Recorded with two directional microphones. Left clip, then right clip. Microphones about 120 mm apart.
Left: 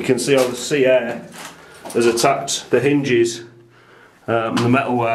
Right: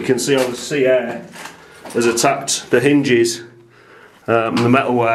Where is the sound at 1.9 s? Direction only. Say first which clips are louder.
Even; 10° right (ahead or behind).